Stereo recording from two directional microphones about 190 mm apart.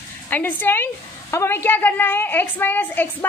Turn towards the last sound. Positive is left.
turn(degrees=10)  # may be behind; listen again after turning